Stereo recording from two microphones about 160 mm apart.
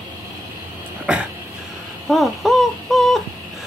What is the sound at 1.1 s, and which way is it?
Dog, 5° right (ahead or behind).